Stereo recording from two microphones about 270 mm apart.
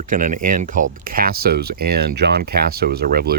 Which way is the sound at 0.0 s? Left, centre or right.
Right.